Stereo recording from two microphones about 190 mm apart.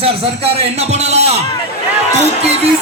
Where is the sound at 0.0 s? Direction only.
30° right (ahead or behind).